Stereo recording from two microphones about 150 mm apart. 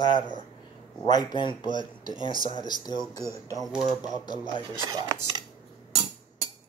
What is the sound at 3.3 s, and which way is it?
Chopping, 20° right (ahead or behind).